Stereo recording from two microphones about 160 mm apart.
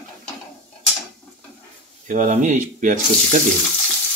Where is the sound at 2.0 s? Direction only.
50° right (ahead or behind).